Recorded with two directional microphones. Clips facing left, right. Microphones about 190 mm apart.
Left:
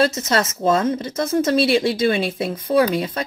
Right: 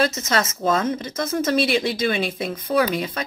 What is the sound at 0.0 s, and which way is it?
Speech, 35° left (ahead or behind).